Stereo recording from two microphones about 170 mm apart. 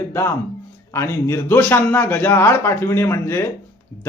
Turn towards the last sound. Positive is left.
turn(degrees=15)  # may be behind; listen again after turning